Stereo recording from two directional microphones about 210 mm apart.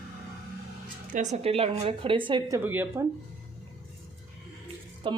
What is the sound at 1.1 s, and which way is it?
Speech, 30° right (ahead or behind).